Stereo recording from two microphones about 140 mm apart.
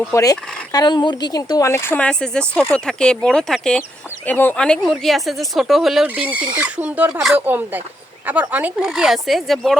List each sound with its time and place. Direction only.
0.1 s speech: 25° left (ahead or behind); by 9.7 s centre (ahead or behind)